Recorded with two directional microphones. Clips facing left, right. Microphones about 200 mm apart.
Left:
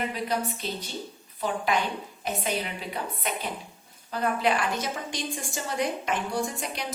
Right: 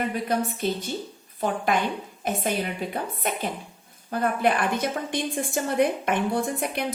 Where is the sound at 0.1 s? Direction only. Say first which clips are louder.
Right 3 dB; 50° right (ahead or behind).